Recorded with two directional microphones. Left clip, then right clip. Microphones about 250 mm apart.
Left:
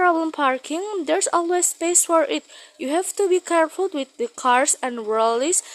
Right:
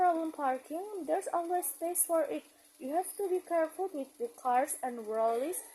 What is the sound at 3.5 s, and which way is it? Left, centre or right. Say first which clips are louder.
Speech: left 12 dB; left.